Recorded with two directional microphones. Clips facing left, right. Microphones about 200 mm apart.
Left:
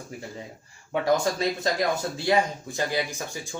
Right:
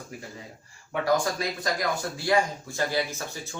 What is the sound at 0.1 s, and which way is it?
Speech, 25° left (ahead or behind).